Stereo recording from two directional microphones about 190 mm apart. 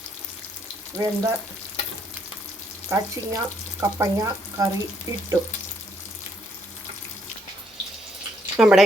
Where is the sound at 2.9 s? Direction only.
15° right (ahead or behind).